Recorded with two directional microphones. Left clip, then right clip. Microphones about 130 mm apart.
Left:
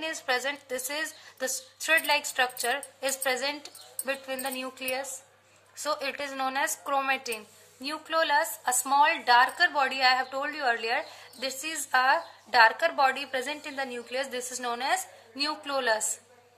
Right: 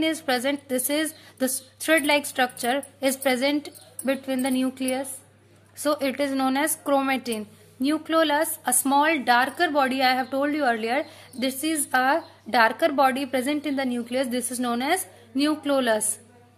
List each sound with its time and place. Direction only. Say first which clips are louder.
0.0 s a woman's voice: right 5 dB; 50° right (ahead or behind)